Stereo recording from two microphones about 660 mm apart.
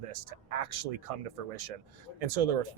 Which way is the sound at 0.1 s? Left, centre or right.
Right.